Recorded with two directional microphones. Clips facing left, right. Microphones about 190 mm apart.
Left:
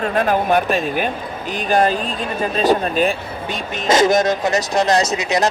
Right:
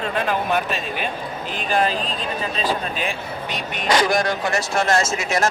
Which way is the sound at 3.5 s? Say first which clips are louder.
Left 4 dB; 25° left (ahead or behind).